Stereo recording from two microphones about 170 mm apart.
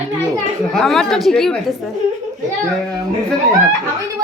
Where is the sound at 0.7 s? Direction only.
5° left (ahead or behind).